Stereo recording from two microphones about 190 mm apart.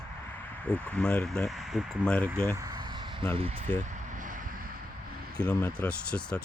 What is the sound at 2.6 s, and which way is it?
Vehicle, 20° right (ahead or behind).